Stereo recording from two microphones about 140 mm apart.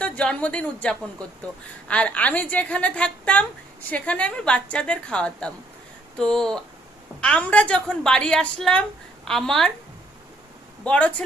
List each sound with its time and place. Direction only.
0.0 s a woman's voice: 10° left (ahead or behind)
10.8 s a woman's voice: 10° left (ahead or behind)